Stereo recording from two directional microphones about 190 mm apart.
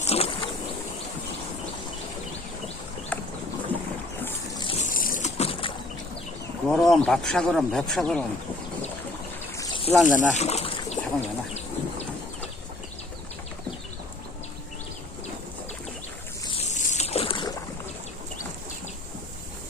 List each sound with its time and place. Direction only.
0.0 s a sound: 35° left (ahead or behind)
3.1 s a sound: 10° left (ahead or behind)
4.2 s boat: 10° left (ahead or behind)
4.6 s boat: 30° left (ahead or behind)
4.9 s vehicle: 45° left (ahead or behind); by 5.7 s 30° left (ahead or behind)
6.7 s speech: centre (ahead or behind)
9.6 s insect: 25° left (ahead or behind)
10.2 s a sound: 35° left (ahead or behind)
16.5 s boat: 35° left (ahead or behind)